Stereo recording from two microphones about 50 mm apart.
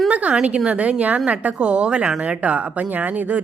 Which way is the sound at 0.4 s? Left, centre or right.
Right.